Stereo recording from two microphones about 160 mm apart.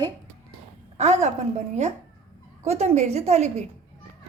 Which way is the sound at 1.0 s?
45° right (ahead or behind).